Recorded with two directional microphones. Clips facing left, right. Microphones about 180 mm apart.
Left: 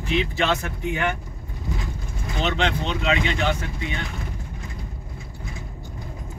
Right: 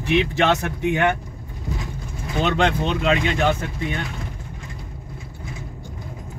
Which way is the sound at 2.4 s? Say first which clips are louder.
Right 4 dB; 50° right (ahead or behind).